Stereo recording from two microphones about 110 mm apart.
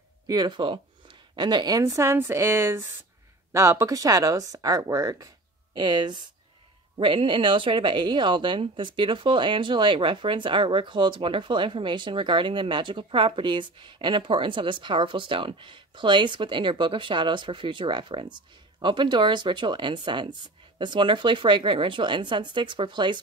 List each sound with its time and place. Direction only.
0.3 s speech: 40° right (ahead or behind)
1.8 s a woman's voice: 30° right (ahead or behind); by 23.2 s 45° right (ahead or behind)